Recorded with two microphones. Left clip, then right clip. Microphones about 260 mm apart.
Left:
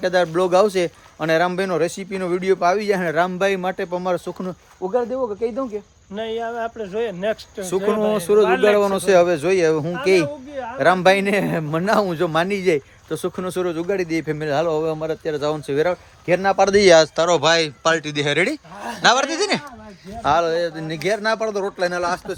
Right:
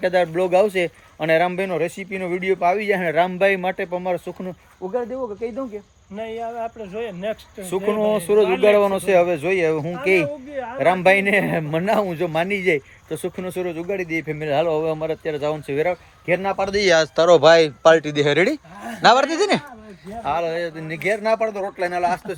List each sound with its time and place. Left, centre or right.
0.0 s speech: centre
16.6 s speech: left
17.2 s speech: centre